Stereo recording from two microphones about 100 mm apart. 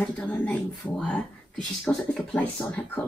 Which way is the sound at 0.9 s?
5° left (ahead or behind).